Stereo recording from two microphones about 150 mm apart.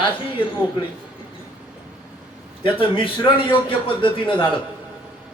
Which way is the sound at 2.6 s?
35° left (ahead or behind).